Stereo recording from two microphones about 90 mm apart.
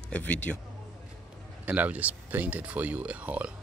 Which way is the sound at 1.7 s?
15° right (ahead or behind).